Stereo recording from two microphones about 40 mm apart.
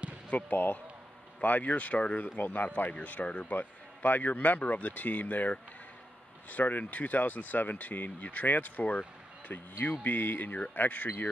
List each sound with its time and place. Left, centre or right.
0.3 s a man's voice: left
9.5 s speech: left